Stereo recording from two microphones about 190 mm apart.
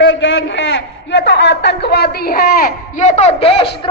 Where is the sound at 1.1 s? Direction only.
65° left (ahead or behind); by 3.7 s 30° left (ahead or behind).